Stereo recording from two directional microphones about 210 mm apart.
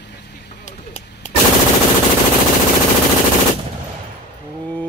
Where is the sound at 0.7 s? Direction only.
35° left (ahead or behind).